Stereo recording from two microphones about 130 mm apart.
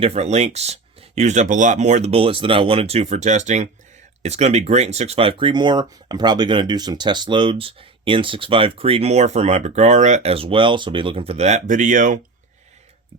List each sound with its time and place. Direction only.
0.0 s speech: 55° right (ahead or behind); by 12.2 s 90° right